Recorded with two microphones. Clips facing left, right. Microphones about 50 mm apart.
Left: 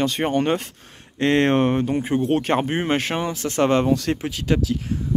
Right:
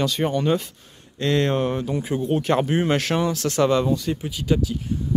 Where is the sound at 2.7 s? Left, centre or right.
Left.